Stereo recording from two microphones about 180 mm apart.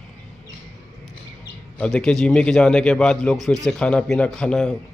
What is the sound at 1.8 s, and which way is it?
Speech, 5° left (ahead or behind).